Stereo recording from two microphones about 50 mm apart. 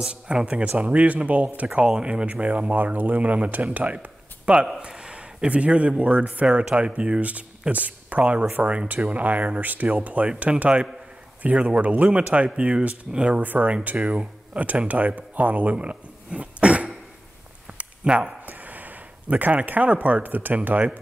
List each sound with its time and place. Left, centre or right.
0.0 s speech: centre
1.9 s speech: right
13.4 s speech: right
17.6 s a sound: right
18.4 s speech: right